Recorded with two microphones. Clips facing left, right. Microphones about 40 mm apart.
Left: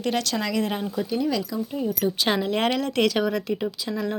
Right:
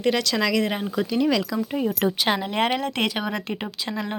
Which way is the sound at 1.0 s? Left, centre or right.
Right.